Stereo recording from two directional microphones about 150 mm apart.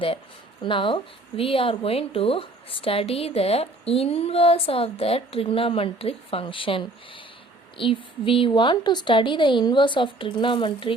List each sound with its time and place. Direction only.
0.6 s speech: 35° left (ahead or behind)